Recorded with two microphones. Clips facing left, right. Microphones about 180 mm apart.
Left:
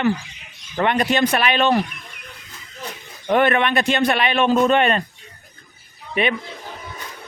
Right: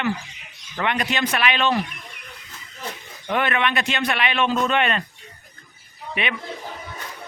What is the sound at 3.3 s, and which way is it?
A man's voice, 45° left (ahead or behind).